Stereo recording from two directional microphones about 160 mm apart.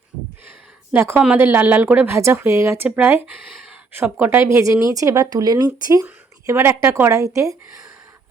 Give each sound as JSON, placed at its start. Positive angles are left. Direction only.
{"t": 0.9, "sound": "a woman's voice", "side_deg": -15}